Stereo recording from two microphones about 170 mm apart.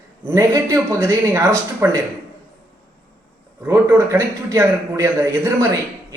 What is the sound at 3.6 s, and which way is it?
A man's voice, 15° right (ahead or behind).